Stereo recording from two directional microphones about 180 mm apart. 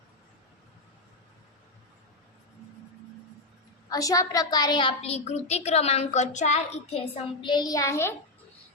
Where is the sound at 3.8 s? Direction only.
20° left (ahead or behind).